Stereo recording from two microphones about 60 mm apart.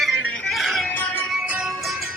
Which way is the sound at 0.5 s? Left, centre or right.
Centre.